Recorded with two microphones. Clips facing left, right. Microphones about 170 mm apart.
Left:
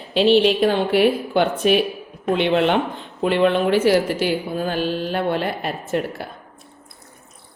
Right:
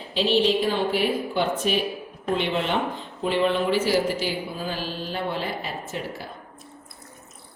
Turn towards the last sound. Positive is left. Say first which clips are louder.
# left 8 dB
turn(degrees=60)  # may be behind; listen again after turning